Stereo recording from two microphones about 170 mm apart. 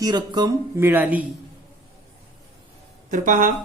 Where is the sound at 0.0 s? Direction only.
25° right (ahead or behind).